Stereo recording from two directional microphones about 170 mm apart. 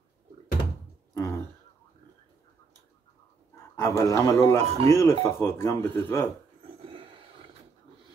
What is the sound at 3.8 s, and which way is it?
Speech, 15° left (ahead or behind).